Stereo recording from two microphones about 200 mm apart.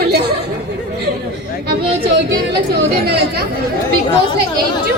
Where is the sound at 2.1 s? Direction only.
55° right (ahead or behind).